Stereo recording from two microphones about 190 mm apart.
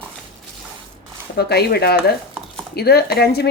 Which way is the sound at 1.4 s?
55° left (ahead or behind).